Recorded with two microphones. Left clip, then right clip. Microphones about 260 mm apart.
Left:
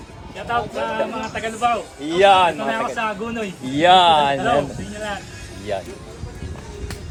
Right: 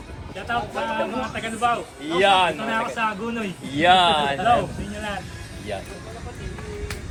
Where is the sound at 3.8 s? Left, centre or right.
Left.